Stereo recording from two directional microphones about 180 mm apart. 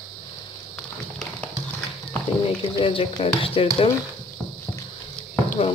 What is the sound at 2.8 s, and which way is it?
Speech, 30° left (ahead or behind).